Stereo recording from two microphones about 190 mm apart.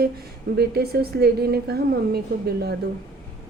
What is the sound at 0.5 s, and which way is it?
A woman's voice, 55° right (ahead or behind).